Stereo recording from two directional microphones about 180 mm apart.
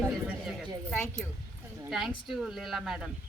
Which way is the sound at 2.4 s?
Centre (ahead or behind).